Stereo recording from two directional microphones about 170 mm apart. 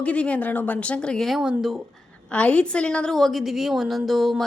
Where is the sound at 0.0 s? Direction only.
5° left (ahead or behind).